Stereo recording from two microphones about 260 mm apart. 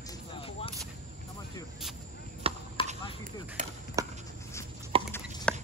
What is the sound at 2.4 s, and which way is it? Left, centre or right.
Basketball bounce, right.